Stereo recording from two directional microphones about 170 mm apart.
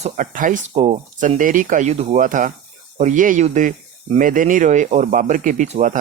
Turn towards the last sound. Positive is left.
turn(degrees=-45)  # may be behind; listen again after turning